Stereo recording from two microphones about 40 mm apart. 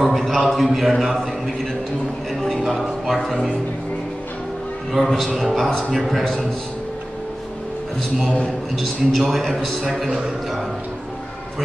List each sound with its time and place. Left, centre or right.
0.0 s a man's voice: centre
2.7 s music: centre
5.0 s a man's voice: centre
8.7 s a man's voice: centre
10.0 s a man's voice: centre